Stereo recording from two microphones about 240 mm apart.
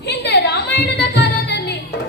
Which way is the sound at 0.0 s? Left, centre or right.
Left.